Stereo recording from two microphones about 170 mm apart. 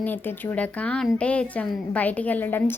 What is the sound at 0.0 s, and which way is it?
A woman's voice, 10° left (ahead or behind).